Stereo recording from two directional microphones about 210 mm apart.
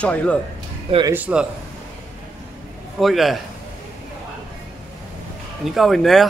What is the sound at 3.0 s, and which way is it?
Speech, centre (ahead or behind).